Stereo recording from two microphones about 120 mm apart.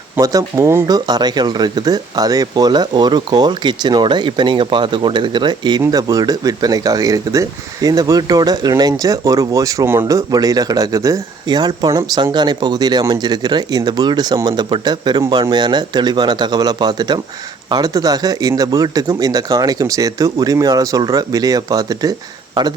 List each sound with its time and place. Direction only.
0.2 s speech: 25° right (ahead or behind)